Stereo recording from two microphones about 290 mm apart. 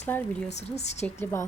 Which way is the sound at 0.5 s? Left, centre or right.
Left.